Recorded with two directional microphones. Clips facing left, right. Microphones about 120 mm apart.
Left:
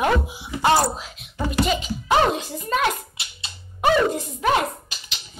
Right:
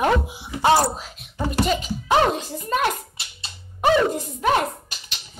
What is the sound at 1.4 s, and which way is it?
A child's voice, 40° right (ahead or behind).